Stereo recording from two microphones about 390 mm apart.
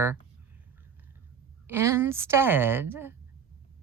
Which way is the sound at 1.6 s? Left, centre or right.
Centre.